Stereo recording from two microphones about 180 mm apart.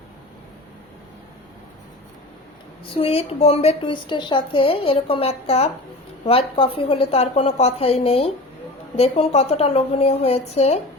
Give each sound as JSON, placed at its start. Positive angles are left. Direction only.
{"t": 2.9, "sound": "a woman's voice", "side_deg": 30}